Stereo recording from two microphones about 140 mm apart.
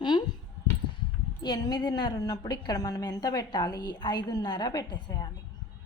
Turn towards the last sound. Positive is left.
turn(degrees=30)  # may be behind; listen again after turning